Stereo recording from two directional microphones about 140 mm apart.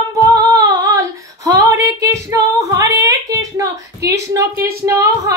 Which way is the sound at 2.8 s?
25° right (ahead or behind).